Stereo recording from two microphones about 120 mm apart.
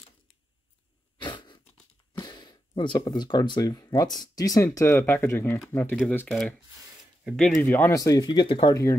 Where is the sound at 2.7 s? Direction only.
40° left (ahead or behind); by 5.9 s 20° left (ahead or behind).